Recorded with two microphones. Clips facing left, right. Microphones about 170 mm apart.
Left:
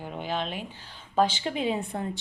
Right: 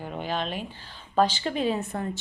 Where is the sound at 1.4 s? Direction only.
15° left (ahead or behind).